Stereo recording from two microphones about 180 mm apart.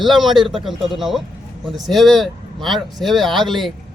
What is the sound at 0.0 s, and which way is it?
Speech, centre (ahead or behind).